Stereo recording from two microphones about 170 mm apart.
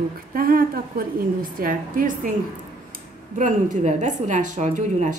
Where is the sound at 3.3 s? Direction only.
45° right (ahead or behind).